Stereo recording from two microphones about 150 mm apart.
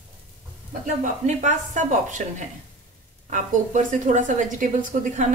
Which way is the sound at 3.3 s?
55° right (ahead or behind).